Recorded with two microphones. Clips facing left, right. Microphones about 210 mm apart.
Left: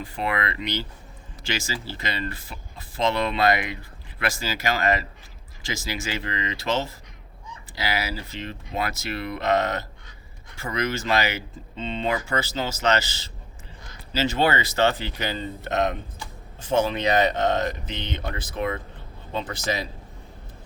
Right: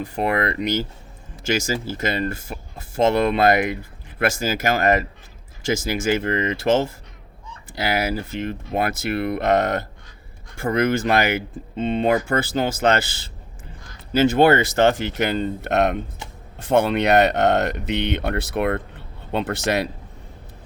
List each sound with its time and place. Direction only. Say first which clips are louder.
0.0 s speech: right 6 dB; 45° right (ahead or behind)
15.2 s speech: right 9 dB; 65° right (ahead or behind)